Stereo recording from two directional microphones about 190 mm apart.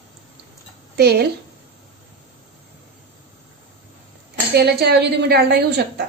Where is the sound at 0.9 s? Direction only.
60° right (ahead or behind).